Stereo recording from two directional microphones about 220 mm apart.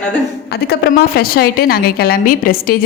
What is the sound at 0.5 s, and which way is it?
A woman's voice, 45° left (ahead or behind).